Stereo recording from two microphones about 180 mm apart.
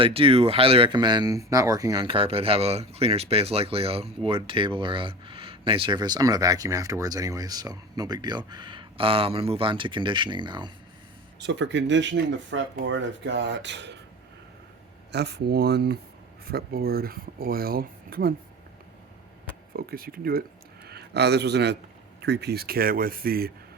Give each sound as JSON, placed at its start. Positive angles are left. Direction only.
{"t": 0.0, "sound": "speech", "side_deg": -30}
{"t": 11.3, "sound": "speech", "side_deg": -75}
{"t": 15.1, "sound": "speech", "side_deg": -65}
{"t": 19.7, "sound": "speech", "side_deg": -55}